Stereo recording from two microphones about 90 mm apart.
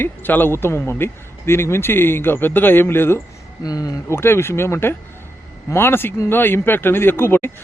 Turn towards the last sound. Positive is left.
turn(degrees=25)  # may be behind; listen again after turning